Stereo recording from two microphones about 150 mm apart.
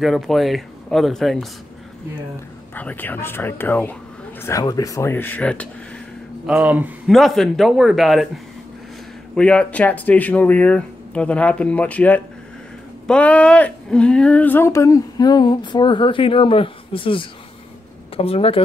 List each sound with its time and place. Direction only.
0.0 s speech: centre (ahead or behind)
2.7 s speech: 10° left (ahead or behind)
6.4 s speech: 10° right (ahead or behind)
7.1 s speech: centre (ahead or behind)
9.3 s speech: 5° left (ahead or behind); by 18.6 s 40° left (ahead or behind)